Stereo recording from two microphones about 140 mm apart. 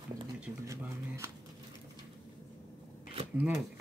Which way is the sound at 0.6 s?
20° right (ahead or behind).